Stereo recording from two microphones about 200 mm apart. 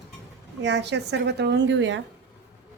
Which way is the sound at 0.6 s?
60° right (ahead or behind).